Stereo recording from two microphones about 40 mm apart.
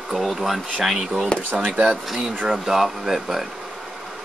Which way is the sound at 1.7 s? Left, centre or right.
Right.